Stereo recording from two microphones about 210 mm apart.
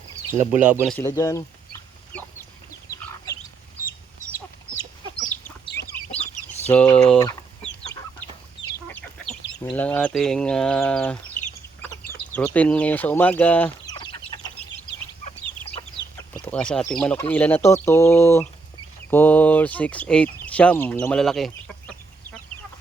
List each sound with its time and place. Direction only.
0.6 s speech: 5° right (ahead or behind)
0.9 s speech: 15° left (ahead or behind)
6.7 s speech: 5° left (ahead or behind)
8.2 s chicken: 10° left (ahead or behind)
12.3 s speech: 5° left (ahead or behind)
13.9 s chicken: 20° left (ahead or behind)
16.3 s chicken: 5° left (ahead or behind)
16.9 s speech: 5° left (ahead or behind)